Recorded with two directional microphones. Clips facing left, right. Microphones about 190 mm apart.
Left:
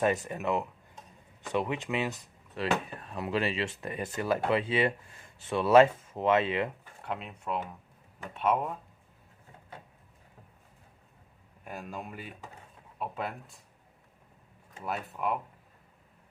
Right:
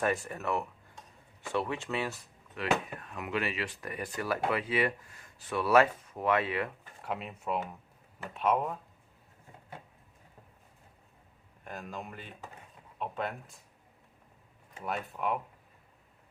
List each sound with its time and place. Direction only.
0.0 s speech: 20° left (ahead or behind)
2.6 s speech: 30° left (ahead or behind)
7.0 s speech: 5° right (ahead or behind)
11.6 s speech: 10° left (ahead or behind)
14.8 s speech: centre (ahead or behind)